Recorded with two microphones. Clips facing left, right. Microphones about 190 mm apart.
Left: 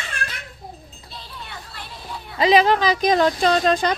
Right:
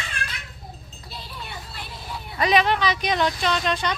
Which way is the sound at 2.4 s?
25° left (ahead or behind).